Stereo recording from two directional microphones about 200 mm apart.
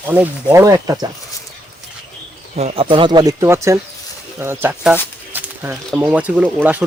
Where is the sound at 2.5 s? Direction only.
30° right (ahead or behind); by 4.9 s 10° right (ahead or behind).